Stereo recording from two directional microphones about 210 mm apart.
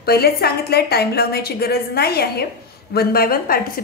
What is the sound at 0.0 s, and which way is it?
Speech, 45° left (ahead or behind).